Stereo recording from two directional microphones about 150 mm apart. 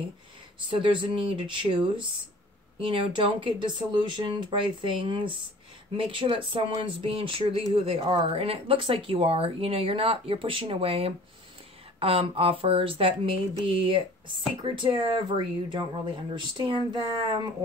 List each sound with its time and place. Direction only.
0.7 s speech: 35° right (ahead or behind)